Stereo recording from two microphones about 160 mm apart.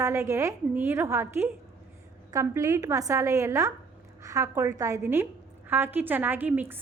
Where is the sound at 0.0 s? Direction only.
20° right (ahead or behind).